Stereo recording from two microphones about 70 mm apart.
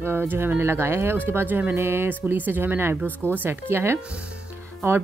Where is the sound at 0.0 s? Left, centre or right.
Right.